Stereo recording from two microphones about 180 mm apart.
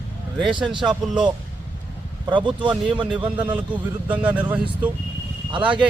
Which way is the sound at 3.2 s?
10° right (ahead or behind).